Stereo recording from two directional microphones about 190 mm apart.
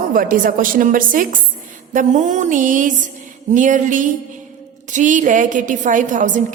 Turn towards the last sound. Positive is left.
turn(degrees=-45)  # may be behind; listen again after turning